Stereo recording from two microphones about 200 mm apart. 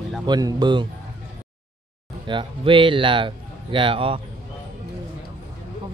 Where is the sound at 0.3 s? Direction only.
20° right (ahead or behind).